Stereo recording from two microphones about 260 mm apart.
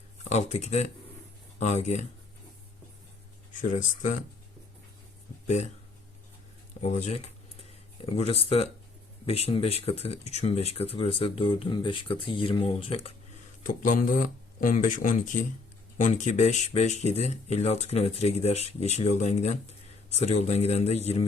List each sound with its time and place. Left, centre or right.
0.3 s speech: left
3.5 s speech: left
6.8 s speech: left